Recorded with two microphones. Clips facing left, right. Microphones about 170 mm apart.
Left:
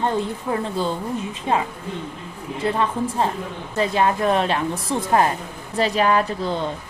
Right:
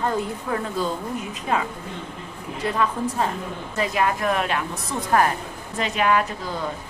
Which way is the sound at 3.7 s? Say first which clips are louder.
Left 3 dB; 30° left (ahead or behind).